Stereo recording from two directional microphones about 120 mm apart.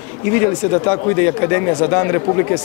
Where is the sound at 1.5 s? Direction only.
20° left (ahead or behind).